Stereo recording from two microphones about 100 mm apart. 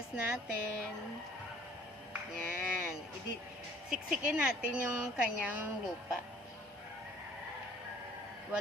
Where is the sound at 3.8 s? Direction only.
5° right (ahead or behind).